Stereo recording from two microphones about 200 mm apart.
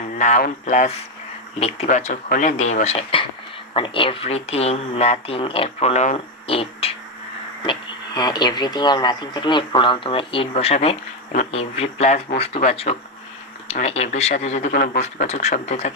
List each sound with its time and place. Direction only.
0.2 s speech: 40° left (ahead or behind)